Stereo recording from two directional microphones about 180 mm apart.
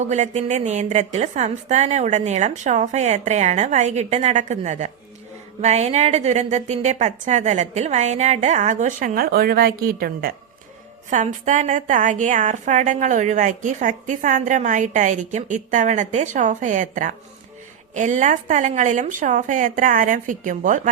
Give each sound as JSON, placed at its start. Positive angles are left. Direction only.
{"t": 0.0, "sound": "a woman's voice", "side_deg": -40}
{"t": 11.1, "sound": "a woman's voice", "side_deg": -45}